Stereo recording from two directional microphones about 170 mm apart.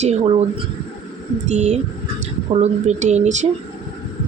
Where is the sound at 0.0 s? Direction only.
40° right (ahead or behind).